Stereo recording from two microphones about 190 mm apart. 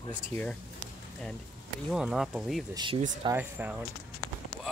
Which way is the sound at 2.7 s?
25° right (ahead or behind).